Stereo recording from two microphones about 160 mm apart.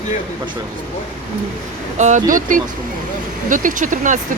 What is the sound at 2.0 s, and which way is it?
Speech, 50° right (ahead or behind).